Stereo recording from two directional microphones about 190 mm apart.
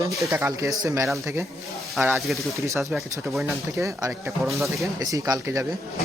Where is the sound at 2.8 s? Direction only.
Centre (ahead or behind).